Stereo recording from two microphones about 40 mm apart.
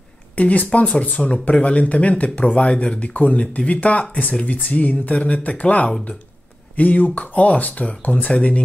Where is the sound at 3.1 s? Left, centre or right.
Left.